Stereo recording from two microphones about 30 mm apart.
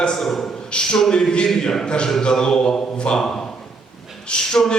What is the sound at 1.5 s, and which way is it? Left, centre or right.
Speech, centre.